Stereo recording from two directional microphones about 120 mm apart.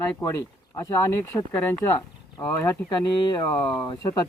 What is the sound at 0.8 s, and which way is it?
Speech, 25° left (ahead or behind).